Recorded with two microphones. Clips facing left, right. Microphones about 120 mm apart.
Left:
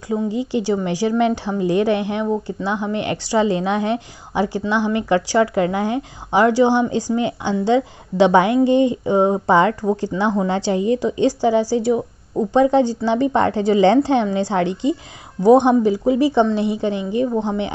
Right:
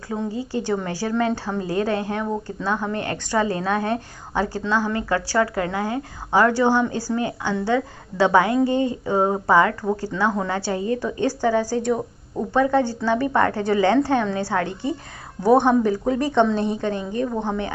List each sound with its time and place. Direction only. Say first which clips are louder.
0.1 s speech: left 5 dB; 15° left (ahead or behind)